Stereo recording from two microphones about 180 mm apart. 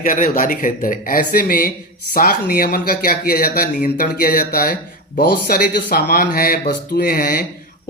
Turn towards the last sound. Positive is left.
turn(degrees=55)  # may be behind; listen again after turning